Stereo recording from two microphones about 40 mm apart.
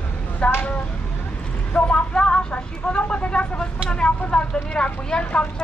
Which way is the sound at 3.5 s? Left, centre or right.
Left.